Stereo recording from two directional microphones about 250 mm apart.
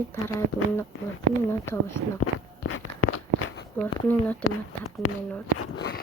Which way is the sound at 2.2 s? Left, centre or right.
Left.